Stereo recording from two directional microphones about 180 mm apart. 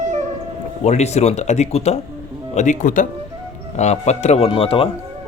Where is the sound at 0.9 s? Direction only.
40° left (ahead or behind).